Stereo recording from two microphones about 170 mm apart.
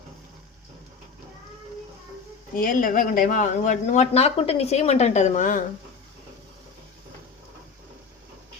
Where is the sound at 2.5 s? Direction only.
55° left (ahead or behind).